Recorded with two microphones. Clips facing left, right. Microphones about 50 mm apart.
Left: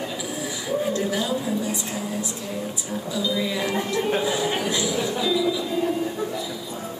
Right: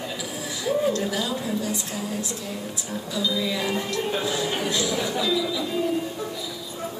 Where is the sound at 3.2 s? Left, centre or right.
Centre.